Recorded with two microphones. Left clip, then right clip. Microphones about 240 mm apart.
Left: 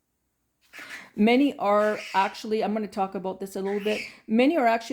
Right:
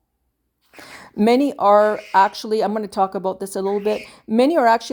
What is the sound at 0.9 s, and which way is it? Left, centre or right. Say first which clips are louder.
Speech: right 6 dB; right.